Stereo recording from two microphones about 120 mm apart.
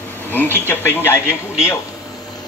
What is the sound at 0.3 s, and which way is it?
Speech, 15° left (ahead or behind).